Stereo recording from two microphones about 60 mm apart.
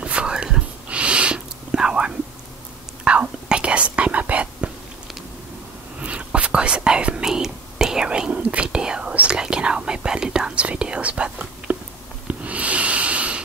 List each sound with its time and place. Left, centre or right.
0.0 s whispering: centre
5.9 s whispering: right
12.3 s wheeze: right